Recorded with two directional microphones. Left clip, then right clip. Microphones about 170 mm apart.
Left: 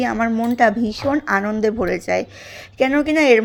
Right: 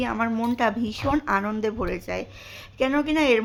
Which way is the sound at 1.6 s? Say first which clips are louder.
Left 8 dB; 20° left (ahead or behind).